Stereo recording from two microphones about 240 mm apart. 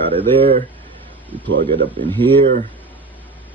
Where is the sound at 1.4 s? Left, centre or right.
Right.